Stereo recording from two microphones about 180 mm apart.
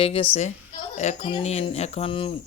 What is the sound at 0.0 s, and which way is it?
Speech, 30° left (ahead or behind).